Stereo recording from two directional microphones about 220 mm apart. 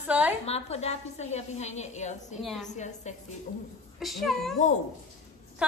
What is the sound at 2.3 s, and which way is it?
Speech, centre (ahead or behind).